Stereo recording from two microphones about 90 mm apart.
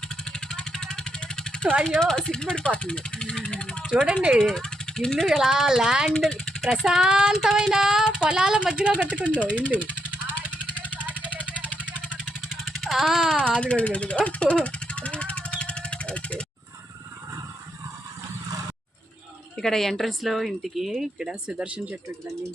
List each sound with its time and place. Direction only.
0.3 s vehicle: 10° left (ahead or behind)
1.8 s speech: 5° left (ahead or behind)
4.0 s child singing: 15° right (ahead or behind)
4.4 s speech: 5° left (ahead or behind)
6.1 s speech: 10° left (ahead or behind)
6.6 s child singing: centre (ahead or behind)
9.3 s speech: 15° left (ahead or behind)
11.7 s vehicle: 15° right (ahead or behind)
12.7 s speech: centre (ahead or behind)
13.3 s jackhammer: 10° left (ahead or behind)
19.5 s speech: 5° left (ahead or behind); by 21.9 s 10° right (ahead or behind)